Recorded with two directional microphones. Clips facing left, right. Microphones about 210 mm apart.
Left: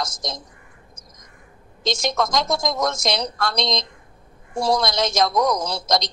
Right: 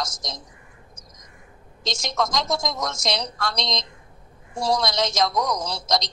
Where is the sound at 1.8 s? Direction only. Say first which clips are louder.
Left 4 dB; 55° left (ahead or behind).